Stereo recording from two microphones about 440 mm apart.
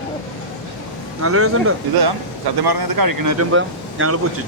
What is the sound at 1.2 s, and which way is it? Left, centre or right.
Speech, right.